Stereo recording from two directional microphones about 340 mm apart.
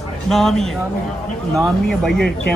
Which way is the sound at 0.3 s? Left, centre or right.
Centre.